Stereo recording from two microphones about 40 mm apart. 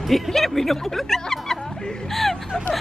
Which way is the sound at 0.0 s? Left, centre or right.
Centre.